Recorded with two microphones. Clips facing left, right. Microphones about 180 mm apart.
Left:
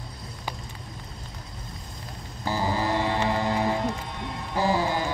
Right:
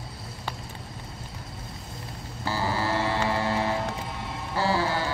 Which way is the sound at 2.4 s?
15° left (ahead or behind).